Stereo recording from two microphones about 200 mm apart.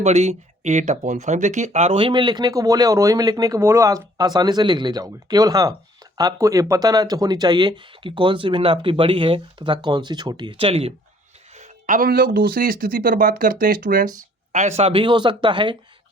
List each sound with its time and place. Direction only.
0.0 s speech: 35° right (ahead or behind)
14.8 s speech: 30° right (ahead or behind)